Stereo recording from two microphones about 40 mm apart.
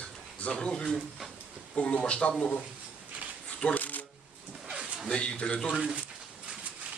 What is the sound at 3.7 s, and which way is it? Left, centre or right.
Shuffling cards, left.